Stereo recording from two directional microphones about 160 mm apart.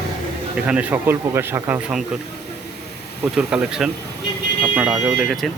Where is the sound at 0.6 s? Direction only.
10° right (ahead or behind).